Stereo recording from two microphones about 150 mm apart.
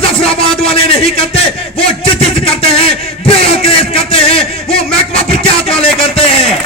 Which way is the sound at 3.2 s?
40° left (ahead or behind).